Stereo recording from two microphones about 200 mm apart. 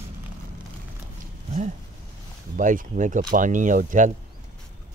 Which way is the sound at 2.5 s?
40° right (ahead or behind).